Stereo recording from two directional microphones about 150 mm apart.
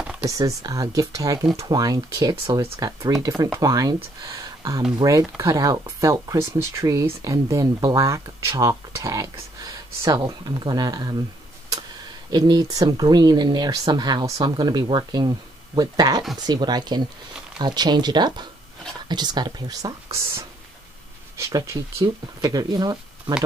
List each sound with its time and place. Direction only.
0.3 s speech: 25° right (ahead or behind)
12.3 s speech: 30° right (ahead or behind)